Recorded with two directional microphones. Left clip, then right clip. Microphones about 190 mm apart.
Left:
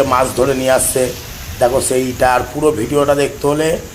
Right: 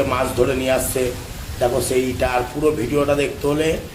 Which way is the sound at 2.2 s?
25° left (ahead or behind).